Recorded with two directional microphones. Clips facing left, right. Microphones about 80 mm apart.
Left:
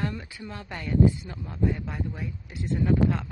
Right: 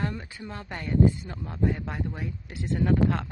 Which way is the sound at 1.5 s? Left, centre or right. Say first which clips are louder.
Even; right.